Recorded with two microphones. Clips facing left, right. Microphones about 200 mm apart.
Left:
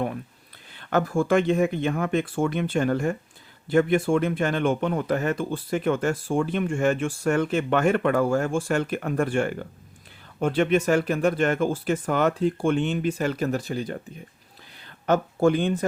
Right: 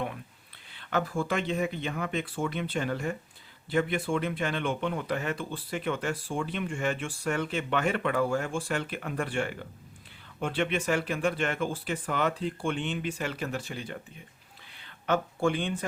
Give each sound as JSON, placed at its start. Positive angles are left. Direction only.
{"t": 0.7, "sound": "speech", "side_deg": 45}